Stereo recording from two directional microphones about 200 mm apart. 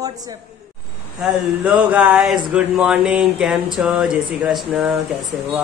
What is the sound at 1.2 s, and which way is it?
Speech, 5° right (ahead or behind).